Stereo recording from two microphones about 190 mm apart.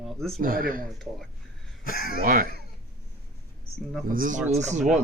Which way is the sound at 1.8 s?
50° left (ahead or behind).